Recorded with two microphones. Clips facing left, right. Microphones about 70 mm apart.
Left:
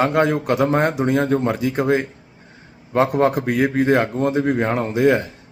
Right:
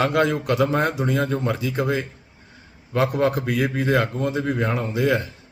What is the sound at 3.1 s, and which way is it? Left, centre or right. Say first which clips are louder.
Speech: left 4 dB; left.